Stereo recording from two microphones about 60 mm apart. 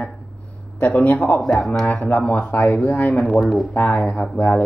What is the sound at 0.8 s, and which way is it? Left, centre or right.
Speech, left.